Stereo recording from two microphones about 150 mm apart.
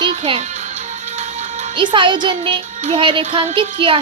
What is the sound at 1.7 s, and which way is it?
Speech, 30° right (ahead or behind).